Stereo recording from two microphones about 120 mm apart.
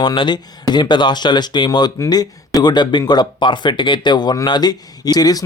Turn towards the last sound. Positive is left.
turn(degrees=30)  # may be behind; listen again after turning